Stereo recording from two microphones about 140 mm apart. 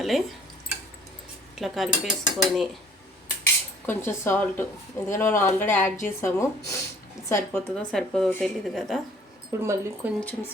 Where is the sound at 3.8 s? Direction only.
15° left (ahead or behind).